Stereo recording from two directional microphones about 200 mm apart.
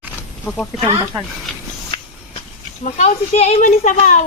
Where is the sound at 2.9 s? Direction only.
35° left (ahead or behind).